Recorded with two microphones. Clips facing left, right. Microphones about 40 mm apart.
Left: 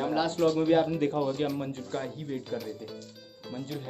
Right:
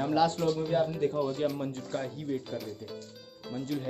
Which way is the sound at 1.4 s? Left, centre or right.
Left.